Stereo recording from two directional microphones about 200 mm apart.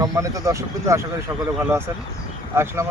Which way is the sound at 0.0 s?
15° right (ahead or behind).